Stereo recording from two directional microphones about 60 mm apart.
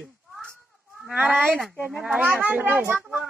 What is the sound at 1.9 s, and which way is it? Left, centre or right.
Speech, centre.